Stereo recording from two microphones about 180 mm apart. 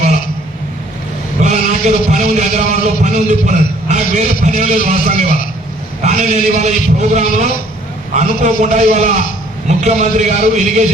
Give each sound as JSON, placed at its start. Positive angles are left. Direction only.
{"t": 1.4, "sound": "a man's voice", "side_deg": -40}